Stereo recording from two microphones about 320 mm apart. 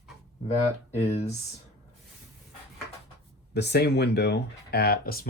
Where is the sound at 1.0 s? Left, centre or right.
Centre.